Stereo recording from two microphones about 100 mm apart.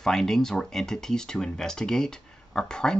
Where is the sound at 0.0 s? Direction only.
5° left (ahead or behind).